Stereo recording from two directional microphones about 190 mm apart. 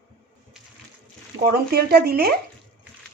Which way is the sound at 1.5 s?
55° right (ahead or behind).